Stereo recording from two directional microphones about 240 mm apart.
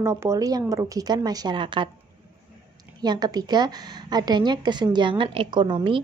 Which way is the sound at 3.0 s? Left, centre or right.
Centre.